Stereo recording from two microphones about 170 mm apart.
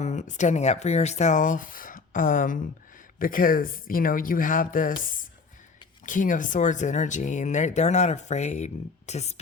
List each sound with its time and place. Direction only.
0.0 s speech: 45° left (ahead or behind)